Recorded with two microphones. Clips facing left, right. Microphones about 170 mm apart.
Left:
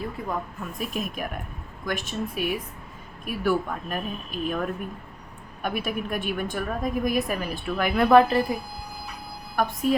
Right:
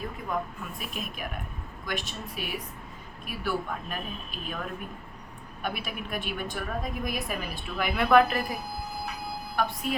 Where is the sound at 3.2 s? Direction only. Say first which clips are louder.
Left 6 dB; 50° left (ahead or behind).